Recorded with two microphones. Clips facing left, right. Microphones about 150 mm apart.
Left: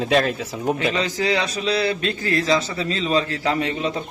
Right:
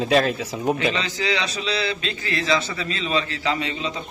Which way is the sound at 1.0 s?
45° left (ahead or behind).